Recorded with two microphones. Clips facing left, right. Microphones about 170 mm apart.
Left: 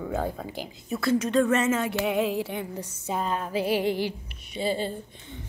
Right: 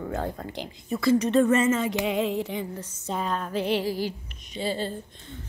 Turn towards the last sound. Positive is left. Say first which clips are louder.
# even
turn(degrees=15)  # may be behind; listen again after turning